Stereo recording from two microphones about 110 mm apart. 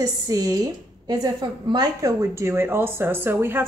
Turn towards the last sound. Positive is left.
turn(degrees=-20)  # may be behind; listen again after turning